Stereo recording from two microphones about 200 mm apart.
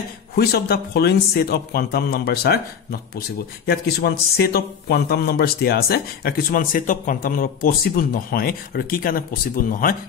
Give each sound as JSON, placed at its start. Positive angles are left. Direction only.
{"t": 0.4, "sound": "speech", "side_deg": 50}